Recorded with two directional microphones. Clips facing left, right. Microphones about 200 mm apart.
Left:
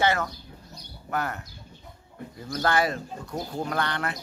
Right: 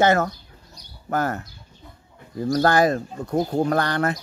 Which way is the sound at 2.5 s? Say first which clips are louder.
Right 6 dB; 40° right (ahead or behind).